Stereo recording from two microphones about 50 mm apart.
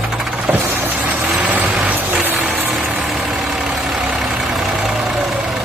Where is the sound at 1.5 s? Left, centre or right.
Right.